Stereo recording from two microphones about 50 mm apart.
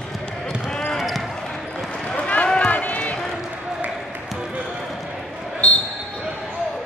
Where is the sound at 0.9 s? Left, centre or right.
Centre.